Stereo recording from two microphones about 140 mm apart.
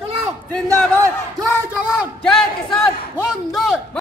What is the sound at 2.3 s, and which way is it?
A man's voice, 5° left (ahead or behind).